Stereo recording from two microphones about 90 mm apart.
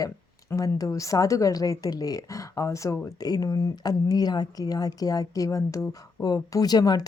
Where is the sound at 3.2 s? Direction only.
45° left (ahead or behind).